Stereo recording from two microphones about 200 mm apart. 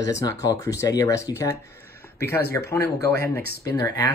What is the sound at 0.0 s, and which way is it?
Speech, 15° left (ahead or behind).